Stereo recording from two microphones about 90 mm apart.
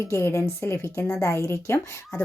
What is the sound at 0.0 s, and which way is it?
A woman's voice, 25° left (ahead or behind).